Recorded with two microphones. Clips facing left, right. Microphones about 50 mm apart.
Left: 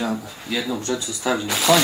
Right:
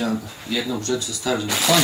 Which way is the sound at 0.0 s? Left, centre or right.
Centre.